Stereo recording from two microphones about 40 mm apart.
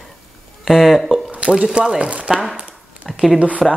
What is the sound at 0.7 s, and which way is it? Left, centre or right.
Mantra, centre.